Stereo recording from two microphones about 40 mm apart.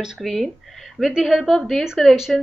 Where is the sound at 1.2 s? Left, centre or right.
Centre.